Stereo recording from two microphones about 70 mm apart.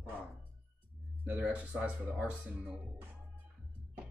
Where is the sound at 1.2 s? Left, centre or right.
Right.